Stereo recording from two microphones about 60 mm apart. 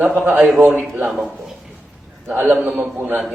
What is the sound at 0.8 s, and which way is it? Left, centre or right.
Speech, right.